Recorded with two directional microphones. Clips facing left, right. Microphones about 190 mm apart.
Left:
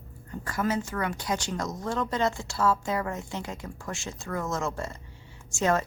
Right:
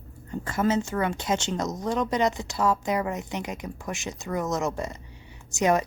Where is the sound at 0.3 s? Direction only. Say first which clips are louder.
Right 4 dB; 25° right (ahead or behind).